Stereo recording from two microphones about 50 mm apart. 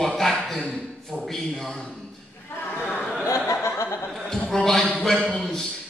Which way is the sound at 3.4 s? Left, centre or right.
Left.